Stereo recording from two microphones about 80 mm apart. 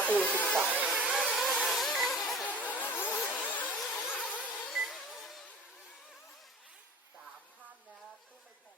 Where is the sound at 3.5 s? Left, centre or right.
Centre.